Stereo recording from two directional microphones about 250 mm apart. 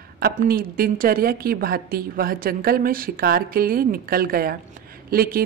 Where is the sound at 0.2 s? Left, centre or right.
Right.